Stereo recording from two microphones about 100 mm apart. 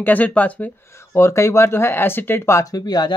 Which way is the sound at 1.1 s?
30° left (ahead or behind).